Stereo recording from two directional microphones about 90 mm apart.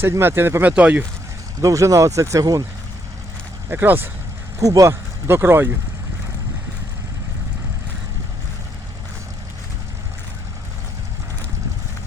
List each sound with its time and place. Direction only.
0.0 s speech: 25° right (ahead or behind)
0.7 s speech: 15° right (ahead or behind)
1.6 s speech: 35° right (ahead or behind)
3.7 s speech: 25° right (ahead or behind)
4.6 s speech: 40° right (ahead or behind)